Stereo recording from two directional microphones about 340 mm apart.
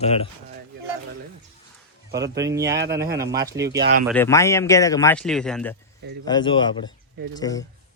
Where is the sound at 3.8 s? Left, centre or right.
Right.